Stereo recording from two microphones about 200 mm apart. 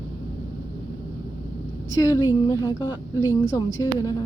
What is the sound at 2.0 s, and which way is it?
A woman's voice, 15° left (ahead or behind).